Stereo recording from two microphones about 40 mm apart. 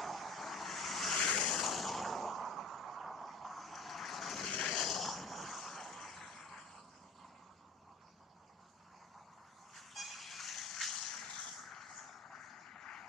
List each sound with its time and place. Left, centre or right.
0.0 s vehicle: centre
1.1 s vehicle: left
1.6 s a sound: centre
4.5 s vehicle: centre
4.7 s vehicle: centre
9.8 s vehicle: centre